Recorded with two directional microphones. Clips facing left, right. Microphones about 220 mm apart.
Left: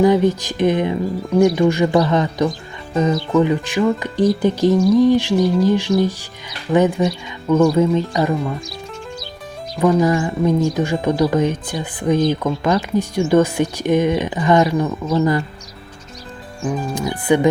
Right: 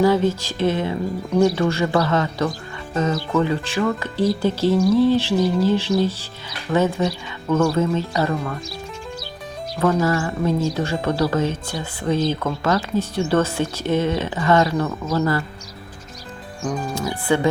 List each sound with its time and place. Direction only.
0.0 s speech: 15° left (ahead or behind)
9.7 s speech: 15° left (ahead or behind)
16.9 s speech: 15° left (ahead or behind)